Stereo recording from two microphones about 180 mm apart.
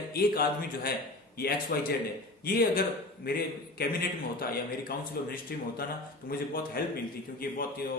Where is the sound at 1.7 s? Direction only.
55° left (ahead or behind).